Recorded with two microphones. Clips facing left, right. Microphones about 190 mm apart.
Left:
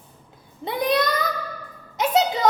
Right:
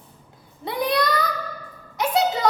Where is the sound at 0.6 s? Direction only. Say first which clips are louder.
Left 1 dB; 20° left (ahead or behind).